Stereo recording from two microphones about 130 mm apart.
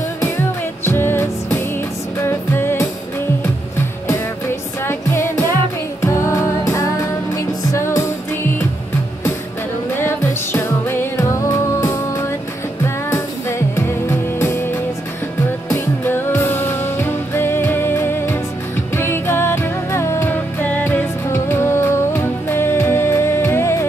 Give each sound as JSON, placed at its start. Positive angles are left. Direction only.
{"t": 0.2, "sound": "music", "side_deg": 20}
{"t": 4.8, "sound": "music", "side_deg": 20}
{"t": 9.9, "sound": "music", "side_deg": 15}
{"t": 15.7, "sound": "music", "side_deg": 15}